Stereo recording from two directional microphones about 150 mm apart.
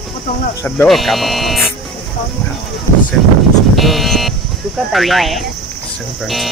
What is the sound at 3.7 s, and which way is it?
Speech, centre (ahead or behind).